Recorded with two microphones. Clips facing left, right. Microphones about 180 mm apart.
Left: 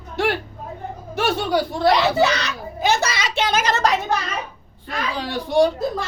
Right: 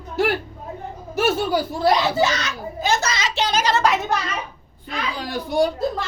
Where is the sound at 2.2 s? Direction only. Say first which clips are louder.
Left 2 dB; 65° left (ahead or behind); by 4.0 s 40° left (ahead or behind).